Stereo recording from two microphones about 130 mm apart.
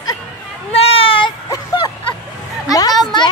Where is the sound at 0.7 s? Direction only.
50° left (ahead or behind).